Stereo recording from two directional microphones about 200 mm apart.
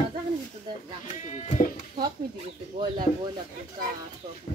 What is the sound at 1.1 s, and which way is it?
Sheep, 35° left (ahead or behind).